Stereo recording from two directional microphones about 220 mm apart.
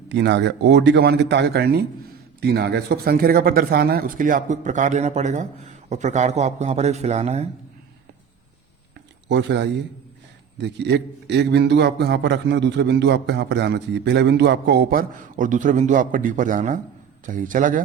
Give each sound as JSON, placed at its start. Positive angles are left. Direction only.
{"t": 0.1, "sound": "a man's voice", "side_deg": -50}
{"t": 9.3, "sound": "a man's voice", "side_deg": -50}